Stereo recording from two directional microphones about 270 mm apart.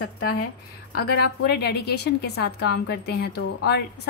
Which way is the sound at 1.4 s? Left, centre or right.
Left.